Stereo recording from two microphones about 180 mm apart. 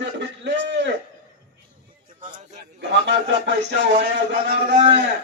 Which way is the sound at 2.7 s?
75° right (ahead or behind).